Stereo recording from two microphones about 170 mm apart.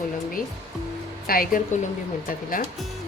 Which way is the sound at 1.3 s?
55° left (ahead or behind).